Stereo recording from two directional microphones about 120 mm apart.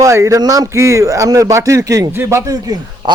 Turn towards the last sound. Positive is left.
turn(degrees=-30)  # may be behind; listen again after turning